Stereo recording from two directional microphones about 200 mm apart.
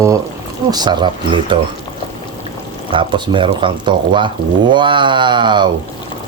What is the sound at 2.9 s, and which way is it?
Speech, 25° right (ahead or behind).